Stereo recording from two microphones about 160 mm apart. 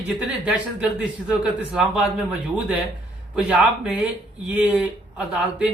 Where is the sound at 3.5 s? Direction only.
10° right (ahead or behind).